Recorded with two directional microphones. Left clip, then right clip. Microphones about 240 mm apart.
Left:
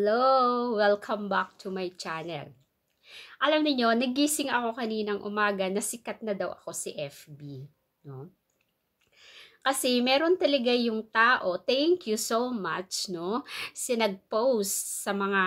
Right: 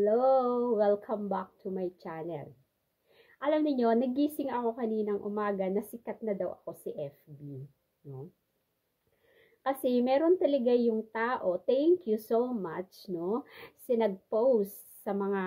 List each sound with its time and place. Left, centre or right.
0.0 s a woman's voice: centre
6.5 s speech: left
6.8 s a woman's voice: centre
9.8 s a woman's voice: centre
14.3 s speech: left
14.6 s a woman's voice: centre